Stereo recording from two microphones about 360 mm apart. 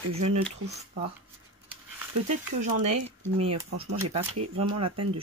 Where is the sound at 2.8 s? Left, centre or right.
Centre.